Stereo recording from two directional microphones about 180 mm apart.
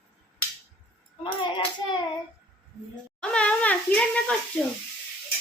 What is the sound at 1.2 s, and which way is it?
Hands, 25° left (ahead or behind).